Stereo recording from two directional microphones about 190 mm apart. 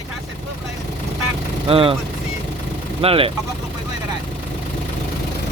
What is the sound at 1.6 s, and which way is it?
Speech, 30° right (ahead or behind).